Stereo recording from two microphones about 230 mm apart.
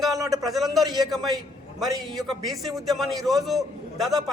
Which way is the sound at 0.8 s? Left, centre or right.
Centre.